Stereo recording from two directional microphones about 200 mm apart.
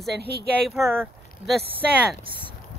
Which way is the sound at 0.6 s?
Centre (ahead or behind).